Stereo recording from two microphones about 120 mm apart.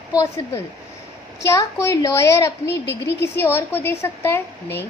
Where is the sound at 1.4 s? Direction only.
25° left (ahead or behind).